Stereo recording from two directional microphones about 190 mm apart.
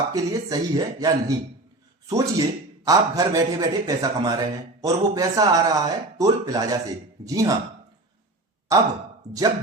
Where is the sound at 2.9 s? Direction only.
20° right (ahead or behind).